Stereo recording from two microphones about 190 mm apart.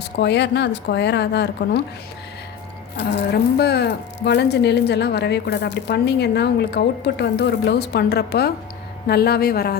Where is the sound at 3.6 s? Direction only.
60° left (ahead or behind).